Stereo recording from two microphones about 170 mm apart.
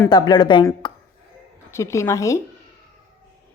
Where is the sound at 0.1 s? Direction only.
25° left (ahead or behind).